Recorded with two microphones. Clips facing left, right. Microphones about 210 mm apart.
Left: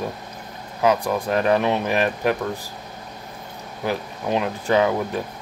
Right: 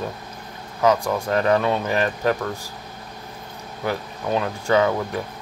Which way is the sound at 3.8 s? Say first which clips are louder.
Left 1 dB; 20° left (ahead or behind).